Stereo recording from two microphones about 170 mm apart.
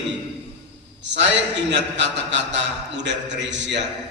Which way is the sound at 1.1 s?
90° right.